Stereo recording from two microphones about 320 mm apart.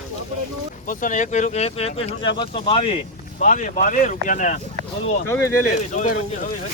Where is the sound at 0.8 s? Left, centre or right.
Left.